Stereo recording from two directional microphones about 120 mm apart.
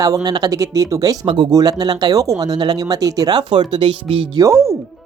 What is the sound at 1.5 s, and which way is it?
Speech, 30° right (ahead or behind).